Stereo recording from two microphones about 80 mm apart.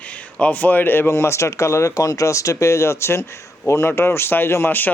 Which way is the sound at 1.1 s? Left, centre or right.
Left.